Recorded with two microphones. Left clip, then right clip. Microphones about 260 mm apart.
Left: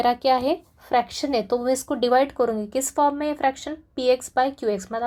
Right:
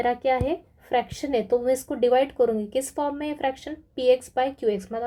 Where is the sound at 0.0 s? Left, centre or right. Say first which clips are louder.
Left 3 dB; centre.